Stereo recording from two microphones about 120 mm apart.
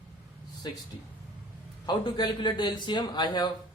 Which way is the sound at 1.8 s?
35° left (ahead or behind).